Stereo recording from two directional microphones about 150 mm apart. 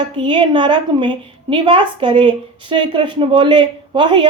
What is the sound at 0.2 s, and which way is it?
A woman's voice, 30° right (ahead or behind).